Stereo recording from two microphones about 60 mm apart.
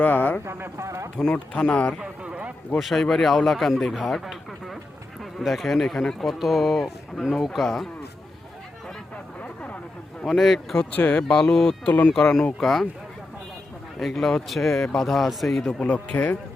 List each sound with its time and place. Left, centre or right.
0.0 s speech: left
0.4 s speech: right
1.3 s speech: centre
2.0 s a sound: centre
2.7 s speech: centre
5.8 s speech: centre
6.1 s speech: centre
9.4 s a sound: left
10.2 s speech: centre
10.9 s speech: left
11.2 s speech: centre
14.0 s speech: centre
15.8 s speech: left